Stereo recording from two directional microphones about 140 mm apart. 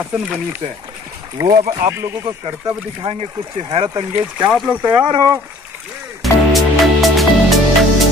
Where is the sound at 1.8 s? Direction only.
20° right (ahead or behind).